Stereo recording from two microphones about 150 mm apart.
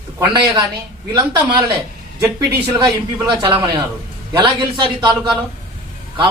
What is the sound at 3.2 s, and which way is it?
A man's voice, 35° right (ahead or behind).